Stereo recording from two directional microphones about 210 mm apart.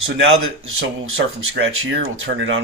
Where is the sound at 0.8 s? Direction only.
65° right (ahead or behind).